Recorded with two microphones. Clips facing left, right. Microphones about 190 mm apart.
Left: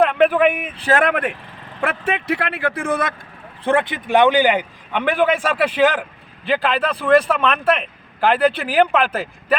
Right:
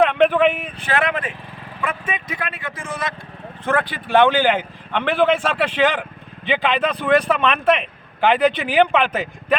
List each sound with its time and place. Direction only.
0.0 s speech: 5° left (ahead or behind)
0.8 s speech: 45° left (ahead or behind); by 1.4 s 60° left (ahead or behind)
1.8 s a man's voice: 70° left (ahead or behind); by 3.2 s 55° left (ahead or behind)
3.6 s speech: 25° left (ahead or behind); by 9.6 s 5° left (ahead or behind)